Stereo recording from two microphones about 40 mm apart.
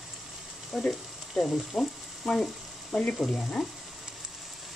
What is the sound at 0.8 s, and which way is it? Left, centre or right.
Frying, centre.